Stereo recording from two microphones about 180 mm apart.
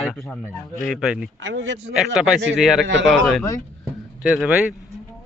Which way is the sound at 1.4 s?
90° right.